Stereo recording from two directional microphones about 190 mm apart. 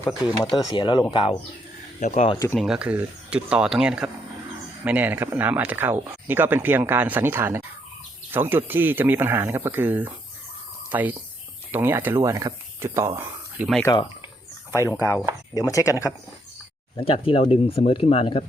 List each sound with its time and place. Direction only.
0.4 s speech: 20° left (ahead or behind)
2.0 s speech: 40° left (ahead or behind)
2.3 s speech: 15° left (ahead or behind)
2.6 s speech: 5° right (ahead or behind)
13.8 s speech: 25° left (ahead or behind)
17.0 s speech: 30° left (ahead or behind)